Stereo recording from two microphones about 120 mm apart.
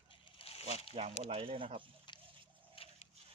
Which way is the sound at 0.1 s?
50° left (ahead or behind).